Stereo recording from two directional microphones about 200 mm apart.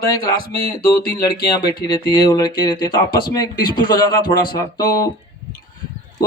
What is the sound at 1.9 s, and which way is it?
Speech, 20° left (ahead or behind).